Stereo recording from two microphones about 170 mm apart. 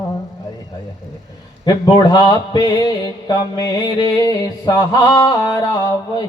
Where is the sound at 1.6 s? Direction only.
25° left (ahead or behind).